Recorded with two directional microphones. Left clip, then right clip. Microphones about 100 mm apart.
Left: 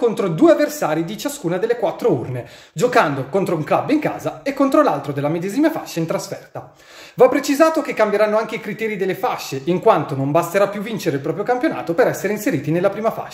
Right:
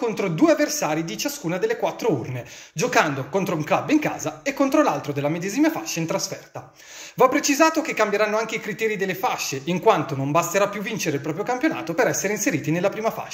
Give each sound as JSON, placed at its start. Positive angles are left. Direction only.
{"t": 0.0, "sound": "speech", "side_deg": 45}